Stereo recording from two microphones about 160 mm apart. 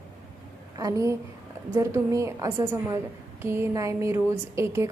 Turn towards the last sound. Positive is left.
turn(degrees=-15)  # may be behind; listen again after turning